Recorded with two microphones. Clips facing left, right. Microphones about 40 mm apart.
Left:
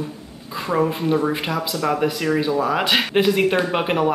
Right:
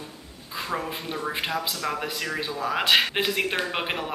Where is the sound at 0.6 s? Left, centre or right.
Centre.